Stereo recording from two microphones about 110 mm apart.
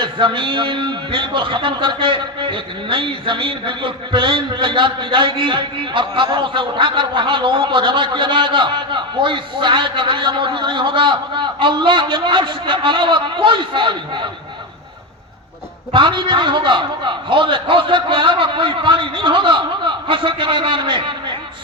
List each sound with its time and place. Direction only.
0.0 s a man's voice: 50° right (ahead or behind)
15.9 s a man's voice: 45° right (ahead or behind)